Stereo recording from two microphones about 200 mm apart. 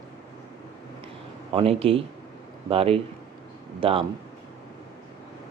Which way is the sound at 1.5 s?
30° right (ahead or behind).